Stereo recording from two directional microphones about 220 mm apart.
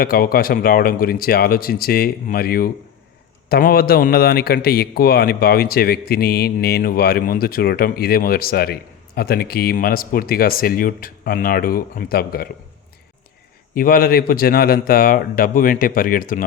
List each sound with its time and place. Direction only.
0.0 s speech: 45° left (ahead or behind)
13.7 s a man's voice: 40° left (ahead or behind)